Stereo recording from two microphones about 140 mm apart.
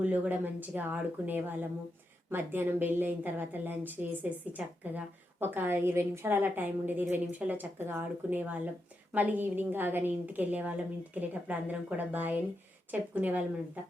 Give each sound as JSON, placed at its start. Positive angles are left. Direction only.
{"t": 0.0, "sound": "a woman's voice", "side_deg": -10}